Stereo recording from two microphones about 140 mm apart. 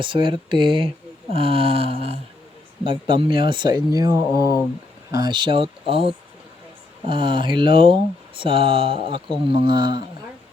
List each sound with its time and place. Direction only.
0.0 s speech: 35° right (ahead or behind)